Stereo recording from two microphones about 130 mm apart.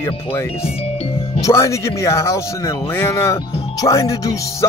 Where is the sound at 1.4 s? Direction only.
20° left (ahead or behind).